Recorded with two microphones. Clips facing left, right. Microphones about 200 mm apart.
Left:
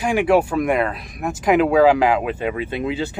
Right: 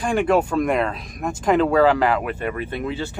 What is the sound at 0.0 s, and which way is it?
Speech, 10° left (ahead or behind).